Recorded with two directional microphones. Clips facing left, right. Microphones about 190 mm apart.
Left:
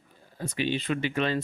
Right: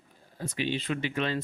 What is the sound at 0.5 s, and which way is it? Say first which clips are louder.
Speech: left 2 dB; 55° left (ahead or behind).